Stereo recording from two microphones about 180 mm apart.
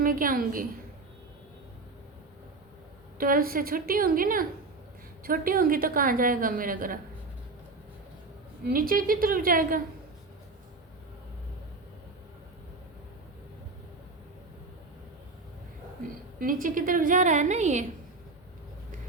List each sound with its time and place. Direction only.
0.0 s a woman's voice: 50° right (ahead or behind)
3.2 s a woman's voice: 50° right (ahead or behind)
8.6 s a woman's voice: 55° right (ahead or behind)
16.4 s a woman's voice: 50° right (ahead or behind)